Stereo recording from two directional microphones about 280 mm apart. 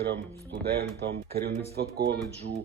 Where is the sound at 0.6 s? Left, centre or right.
Right.